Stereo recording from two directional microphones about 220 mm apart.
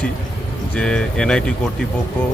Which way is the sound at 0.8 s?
5° left (ahead or behind).